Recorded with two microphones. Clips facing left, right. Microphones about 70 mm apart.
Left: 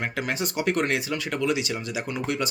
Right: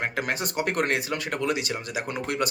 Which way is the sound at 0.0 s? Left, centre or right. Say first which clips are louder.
Even; right.